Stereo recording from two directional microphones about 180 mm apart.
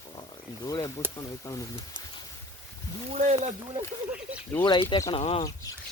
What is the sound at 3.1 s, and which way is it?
Speech, 40° right (ahead or behind).